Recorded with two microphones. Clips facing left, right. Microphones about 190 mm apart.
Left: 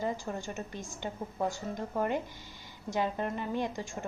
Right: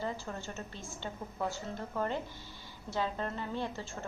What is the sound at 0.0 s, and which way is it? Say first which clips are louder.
A woman's voice: left 4 dB; 15° left (ahead or behind).